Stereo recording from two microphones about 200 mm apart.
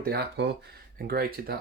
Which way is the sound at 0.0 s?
50° right (ahead or behind).